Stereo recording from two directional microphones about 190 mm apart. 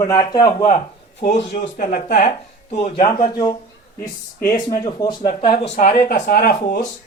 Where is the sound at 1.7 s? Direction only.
55° left (ahead or behind).